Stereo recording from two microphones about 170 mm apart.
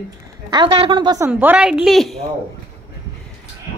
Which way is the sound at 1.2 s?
10° right (ahead or behind).